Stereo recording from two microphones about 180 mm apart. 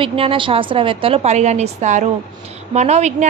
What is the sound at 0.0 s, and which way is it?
A woman's voice, 30° right (ahead or behind).